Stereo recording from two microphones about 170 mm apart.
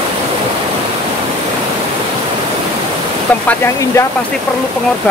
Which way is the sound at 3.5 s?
15° left (ahead or behind).